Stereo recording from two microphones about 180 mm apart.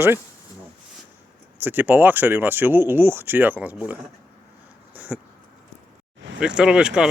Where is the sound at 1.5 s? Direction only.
10° right (ahead or behind).